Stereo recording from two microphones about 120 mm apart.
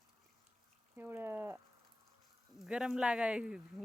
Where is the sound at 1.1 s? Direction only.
15° right (ahead or behind).